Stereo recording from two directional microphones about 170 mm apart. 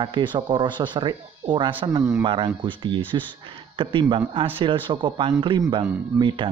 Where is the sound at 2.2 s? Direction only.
30° right (ahead or behind).